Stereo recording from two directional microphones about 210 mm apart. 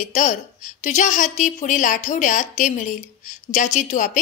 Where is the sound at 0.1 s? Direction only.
35° left (ahead or behind).